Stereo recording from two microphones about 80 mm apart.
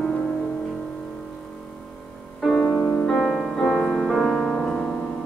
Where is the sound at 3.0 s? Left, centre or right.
Centre.